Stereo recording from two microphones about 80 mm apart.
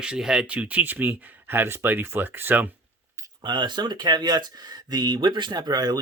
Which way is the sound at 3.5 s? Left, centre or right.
Right.